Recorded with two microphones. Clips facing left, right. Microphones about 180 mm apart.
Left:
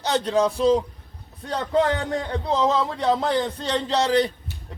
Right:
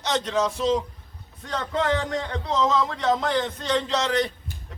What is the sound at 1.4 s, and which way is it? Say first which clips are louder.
A man's voice: left 4 dB; 35° left (ahead or behind).